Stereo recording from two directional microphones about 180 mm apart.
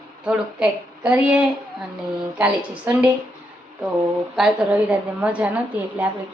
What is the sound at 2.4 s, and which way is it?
Speech, 5° right (ahead or behind).